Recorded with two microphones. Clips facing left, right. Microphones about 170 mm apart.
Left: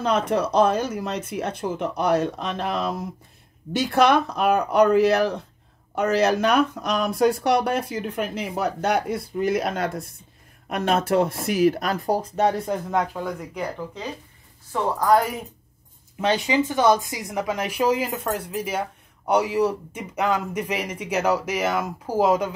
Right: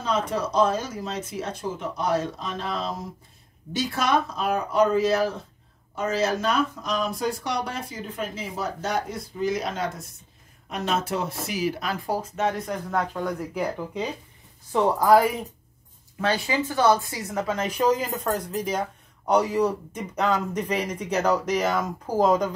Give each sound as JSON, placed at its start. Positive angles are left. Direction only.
{"t": 0.0, "sound": "speech", "side_deg": 65}
{"t": 12.9, "sound": "speech", "side_deg": 10}
{"t": 14.7, "sound": "a woman's voice", "side_deg": -10}
{"t": 16.2, "sound": "speech", "side_deg": 20}